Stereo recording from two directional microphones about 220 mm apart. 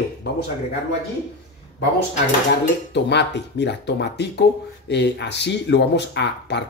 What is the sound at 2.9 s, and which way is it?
Speech, 50° left (ahead or behind).